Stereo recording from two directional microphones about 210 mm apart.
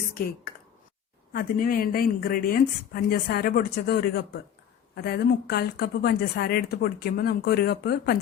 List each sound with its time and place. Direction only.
1.3 s a woman's voice: 40° left (ahead or behind)